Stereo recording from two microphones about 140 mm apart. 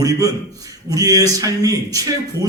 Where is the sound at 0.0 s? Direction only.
25° right (ahead or behind).